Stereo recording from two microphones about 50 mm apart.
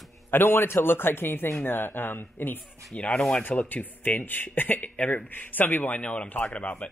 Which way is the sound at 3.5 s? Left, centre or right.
Left.